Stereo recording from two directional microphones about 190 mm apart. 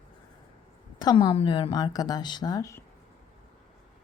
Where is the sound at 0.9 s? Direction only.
20° left (ahead or behind).